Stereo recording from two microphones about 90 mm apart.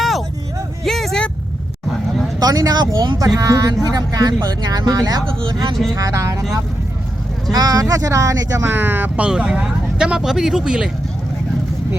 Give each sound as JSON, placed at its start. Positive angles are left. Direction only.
{"t": 0.0, "sound": "a sound", "side_deg": 0}
{"t": 0.9, "sound": "vehicle", "side_deg": 5}
{"t": 2.4, "sound": "speech", "side_deg": -45}
{"t": 3.3, "sound": "speech", "side_deg": -40}
{"t": 5.9, "sound": "speech", "side_deg": -35}
{"t": 7.5, "sound": "speech", "side_deg": -45}
{"t": 8.6, "sound": "speech", "side_deg": -25}